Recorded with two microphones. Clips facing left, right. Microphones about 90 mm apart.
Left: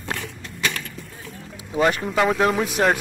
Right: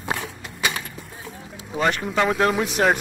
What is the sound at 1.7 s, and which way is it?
Speech, 10° left (ahead or behind).